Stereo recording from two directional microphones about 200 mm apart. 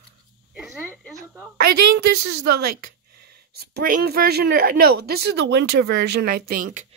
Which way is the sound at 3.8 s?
50° right (ahead or behind).